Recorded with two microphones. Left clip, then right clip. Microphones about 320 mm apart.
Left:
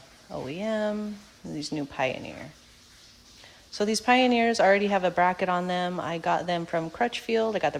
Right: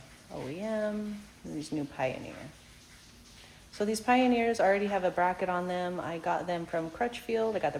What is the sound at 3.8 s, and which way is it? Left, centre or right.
A woman's voice, left.